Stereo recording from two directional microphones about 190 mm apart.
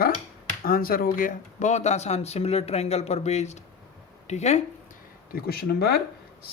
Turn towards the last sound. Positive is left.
turn(degrees=55)  # may be behind; listen again after turning